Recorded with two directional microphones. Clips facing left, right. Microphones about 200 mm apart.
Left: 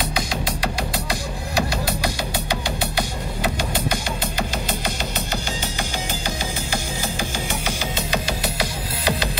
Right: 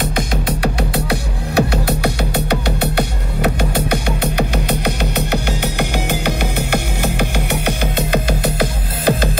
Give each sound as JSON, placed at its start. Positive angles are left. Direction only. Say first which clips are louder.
{"t": 0.0, "sound": "music", "louder": "right 5 dB", "side_deg": -55}